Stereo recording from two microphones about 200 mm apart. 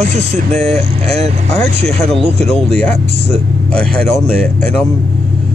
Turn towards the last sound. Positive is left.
turn(degrees=5)  # may be behind; listen again after turning